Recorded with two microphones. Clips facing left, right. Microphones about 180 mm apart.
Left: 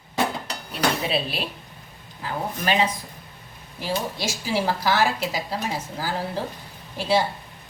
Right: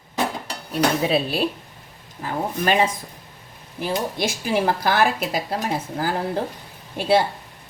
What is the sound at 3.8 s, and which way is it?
Speech, 55° right (ahead or behind).